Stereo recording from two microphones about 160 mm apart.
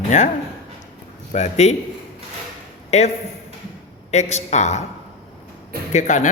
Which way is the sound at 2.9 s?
45° left (ahead or behind).